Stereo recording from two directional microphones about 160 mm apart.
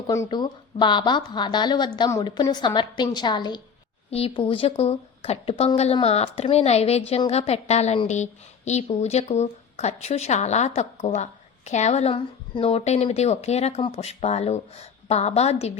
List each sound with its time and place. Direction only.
0.1 s a woman's voice: 25° left (ahead or behind); by 15.8 s 40° left (ahead or behind)